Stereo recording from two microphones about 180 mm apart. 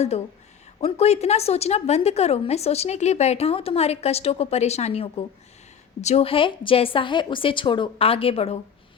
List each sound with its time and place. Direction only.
0.8 s a woman's voice: 35° left (ahead or behind)